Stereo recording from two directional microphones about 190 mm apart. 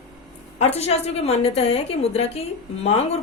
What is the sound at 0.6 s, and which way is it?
A woman's voice, 35° left (ahead or behind).